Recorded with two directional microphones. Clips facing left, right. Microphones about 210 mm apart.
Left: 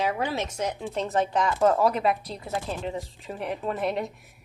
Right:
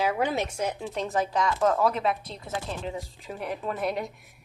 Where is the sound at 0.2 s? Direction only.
20° right (ahead or behind).